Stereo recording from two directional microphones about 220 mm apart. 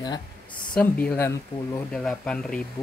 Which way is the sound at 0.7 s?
5° left (ahead or behind).